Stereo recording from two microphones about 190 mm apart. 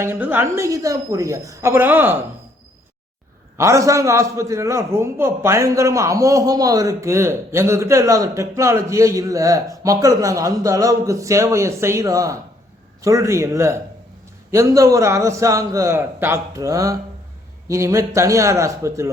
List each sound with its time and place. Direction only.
0.0 s a man's voice: 10° right (ahead or behind)
3.6 s a man's voice: 15° right (ahead or behind)